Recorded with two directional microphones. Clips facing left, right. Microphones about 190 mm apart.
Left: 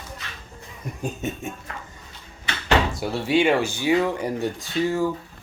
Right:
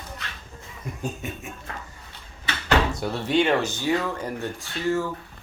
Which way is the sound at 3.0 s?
10° left (ahead or behind).